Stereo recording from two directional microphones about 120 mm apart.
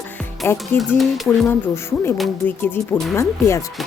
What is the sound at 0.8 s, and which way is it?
Speech, centre (ahead or behind).